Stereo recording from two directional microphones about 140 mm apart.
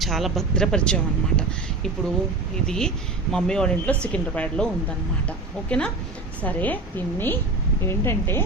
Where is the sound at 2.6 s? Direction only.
5° left (ahead or behind).